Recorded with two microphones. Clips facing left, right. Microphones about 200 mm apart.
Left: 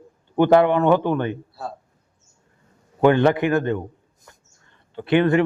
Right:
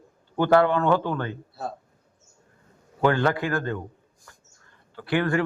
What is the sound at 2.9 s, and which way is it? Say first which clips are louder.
Speech: left 6 dB; 20° left (ahead or behind).